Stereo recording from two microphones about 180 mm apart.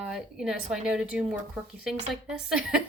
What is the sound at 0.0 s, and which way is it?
Speech, centre (ahead or behind).